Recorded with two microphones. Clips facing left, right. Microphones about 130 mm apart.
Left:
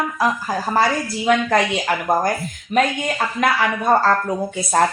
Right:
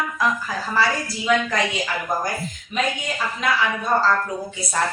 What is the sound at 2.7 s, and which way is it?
A woman's voice, 55° left (ahead or behind).